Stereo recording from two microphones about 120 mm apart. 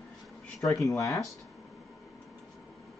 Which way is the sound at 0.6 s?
25° left (ahead or behind).